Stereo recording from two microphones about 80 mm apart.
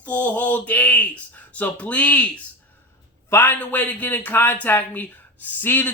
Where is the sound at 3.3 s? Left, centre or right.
Left.